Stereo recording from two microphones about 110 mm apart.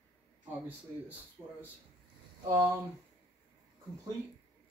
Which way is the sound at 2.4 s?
30° right (ahead or behind).